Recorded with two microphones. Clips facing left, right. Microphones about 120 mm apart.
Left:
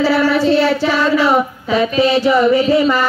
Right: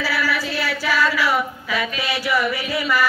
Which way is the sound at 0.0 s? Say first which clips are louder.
Left 10 dB; 25° left (ahead or behind).